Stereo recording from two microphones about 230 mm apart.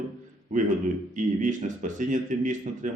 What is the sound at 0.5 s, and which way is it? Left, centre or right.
A man's voice, right.